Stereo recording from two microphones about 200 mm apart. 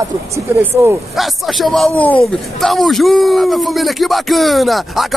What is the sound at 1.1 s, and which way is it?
A man's voice, centre (ahead or behind).